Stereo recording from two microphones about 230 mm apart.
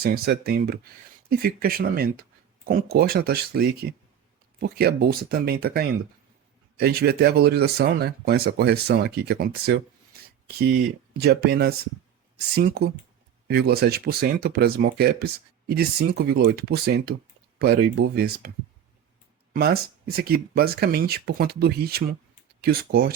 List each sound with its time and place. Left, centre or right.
0.0 s speech: right
19.5 s speech: right